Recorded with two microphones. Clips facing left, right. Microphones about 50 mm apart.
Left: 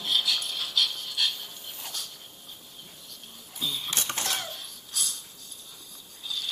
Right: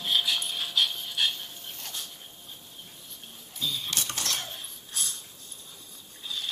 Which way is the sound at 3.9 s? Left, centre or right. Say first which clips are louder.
Left 1 dB; left.